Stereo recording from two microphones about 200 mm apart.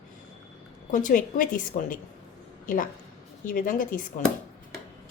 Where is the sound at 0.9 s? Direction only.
40° left (ahead or behind).